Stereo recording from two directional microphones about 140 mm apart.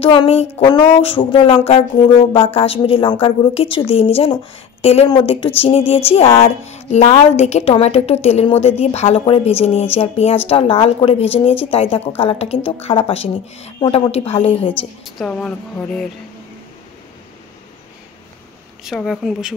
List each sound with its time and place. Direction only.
0.0 s a woman's voice: 40° left (ahead or behind)
13.7 s a woman's voice: 35° left (ahead or behind)
15.0 s speech: 5° left (ahead or behind)
18.9 s speech: centre (ahead or behind)